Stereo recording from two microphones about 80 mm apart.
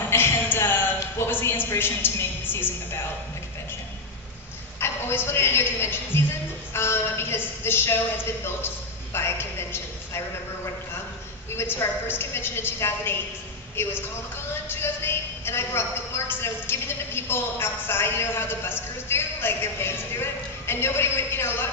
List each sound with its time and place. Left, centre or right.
0.1 s a sound: left
1.2 s a woman's voice: left
4.7 s a man's voice: left
9.1 s a man's voice: left